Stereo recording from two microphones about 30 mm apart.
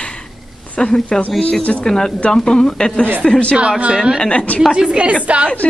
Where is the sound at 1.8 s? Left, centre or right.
Centre.